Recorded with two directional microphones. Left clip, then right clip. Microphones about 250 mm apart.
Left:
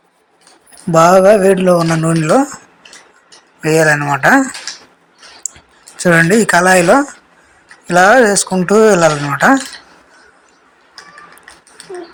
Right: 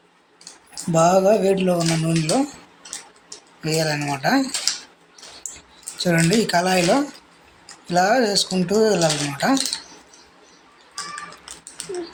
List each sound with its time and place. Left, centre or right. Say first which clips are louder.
0.9 s speech: left 9 dB; left
3.8 s speech: left 12 dB; left
6.0 s speech: left 10 dB; left